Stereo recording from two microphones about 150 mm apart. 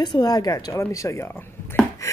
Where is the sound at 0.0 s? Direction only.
25° left (ahead or behind).